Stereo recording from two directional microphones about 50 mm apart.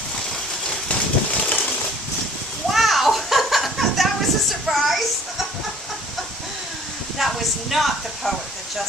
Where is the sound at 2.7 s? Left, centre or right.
Centre.